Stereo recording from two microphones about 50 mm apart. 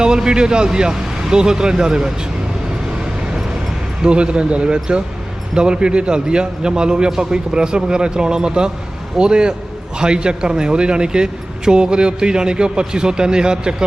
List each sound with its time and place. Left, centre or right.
0.0 s a man's voice: centre
4.0 s a man's voice: centre